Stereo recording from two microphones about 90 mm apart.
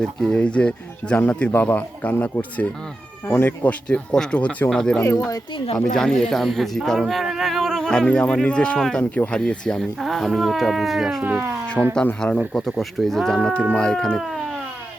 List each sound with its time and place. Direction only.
0.0 s speech: 10° left (ahead or behind)
5.1 s speech: 45° left (ahead or behind)
5.8 s speech: 5° left (ahead or behind)
11.2 s speech: 20° right (ahead or behind)
11.9 s speech: 10° left (ahead or behind)